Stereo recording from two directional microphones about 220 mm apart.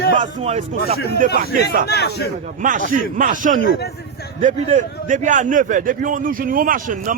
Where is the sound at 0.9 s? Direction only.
45° left (ahead or behind).